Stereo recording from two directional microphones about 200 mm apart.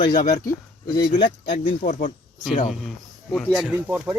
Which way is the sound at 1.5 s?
40° left (ahead or behind).